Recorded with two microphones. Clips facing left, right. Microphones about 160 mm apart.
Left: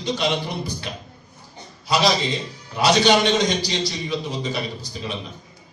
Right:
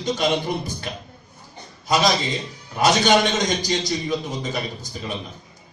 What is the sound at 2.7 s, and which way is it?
A man's voice, 50° right (ahead or behind).